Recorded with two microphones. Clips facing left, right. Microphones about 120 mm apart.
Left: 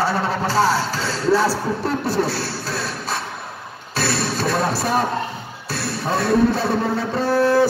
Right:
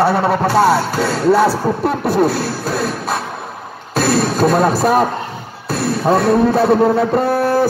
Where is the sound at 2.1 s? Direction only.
55° right (ahead or behind).